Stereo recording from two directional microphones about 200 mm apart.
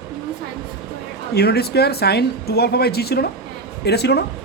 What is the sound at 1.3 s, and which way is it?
A man's voice, 55° left (ahead or behind).